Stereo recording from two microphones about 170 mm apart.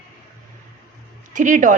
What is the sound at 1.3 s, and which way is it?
Speech, 50° right (ahead or behind).